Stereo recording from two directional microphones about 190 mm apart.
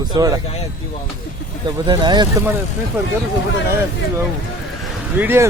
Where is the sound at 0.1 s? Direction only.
20° right (ahead or behind).